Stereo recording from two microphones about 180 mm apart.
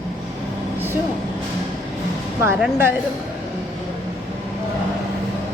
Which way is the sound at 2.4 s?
15° right (ahead or behind).